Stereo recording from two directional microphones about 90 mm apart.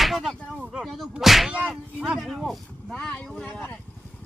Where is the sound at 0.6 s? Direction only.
10° right (ahead or behind).